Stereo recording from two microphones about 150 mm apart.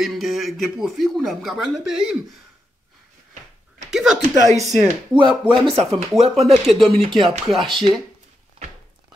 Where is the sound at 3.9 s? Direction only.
5° right (ahead or behind).